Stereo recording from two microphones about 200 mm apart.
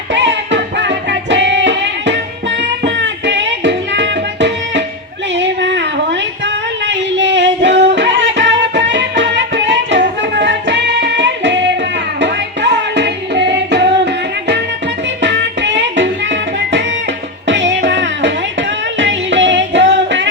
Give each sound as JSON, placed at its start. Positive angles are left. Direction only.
{"t": 0.1, "sound": "music", "side_deg": -65}
{"t": 5.4, "sound": "a sound", "side_deg": -65}
{"t": 12.2, "sound": "music", "side_deg": -60}